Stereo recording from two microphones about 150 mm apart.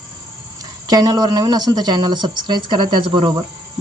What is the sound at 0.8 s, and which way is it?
Speech, 25° right (ahead or behind).